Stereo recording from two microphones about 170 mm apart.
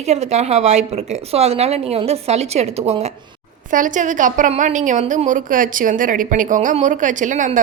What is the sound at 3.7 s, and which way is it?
A woman's voice, 50° right (ahead or behind).